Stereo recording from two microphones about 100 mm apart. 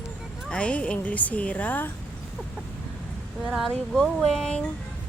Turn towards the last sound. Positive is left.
turn(degrees=5)  # may be behind; listen again after turning